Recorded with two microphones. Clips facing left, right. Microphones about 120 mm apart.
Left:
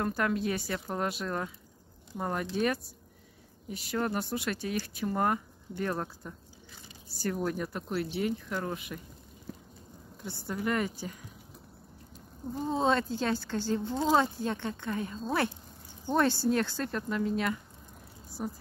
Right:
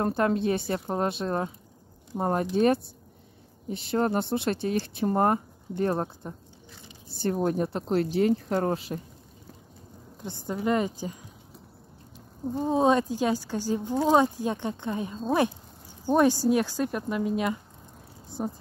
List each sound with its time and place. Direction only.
0.0 s a woman's voice: 30° right (ahead or behind)
7.9 s speech: 40° right (ahead or behind)
8.7 s speech: 35° right (ahead or behind)
10.2 s speech: 20° right (ahead or behind)
12.5 s speech: 15° right (ahead or behind)